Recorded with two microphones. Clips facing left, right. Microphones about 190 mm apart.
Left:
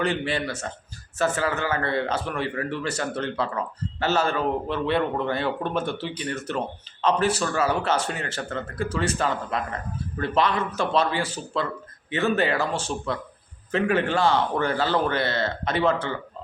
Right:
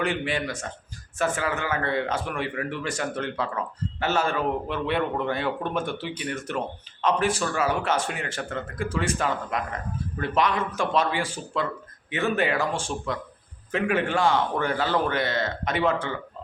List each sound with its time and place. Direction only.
0.0 s a man's voice: 15° right (ahead or behind)
1.5 s a man's voice: 35° left (ahead or behind)
1.8 s a man's voice: 15° right (ahead or behind)